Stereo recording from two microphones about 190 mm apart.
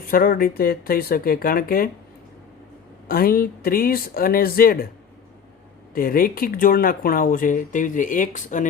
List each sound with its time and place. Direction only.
0.0 s speech: 50° left (ahead or behind)
3.1 s speech: 50° left (ahead or behind)
5.9 s speech: 50° left (ahead or behind)